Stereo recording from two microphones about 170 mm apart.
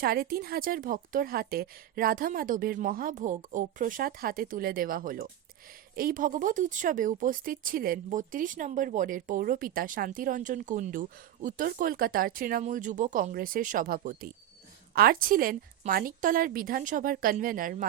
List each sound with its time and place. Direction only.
0.0 s a woman's voice: 60° right (ahead or behind)